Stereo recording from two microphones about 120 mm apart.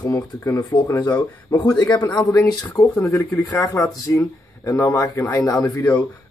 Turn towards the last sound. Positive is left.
turn(degrees=15)  # may be behind; listen again after turning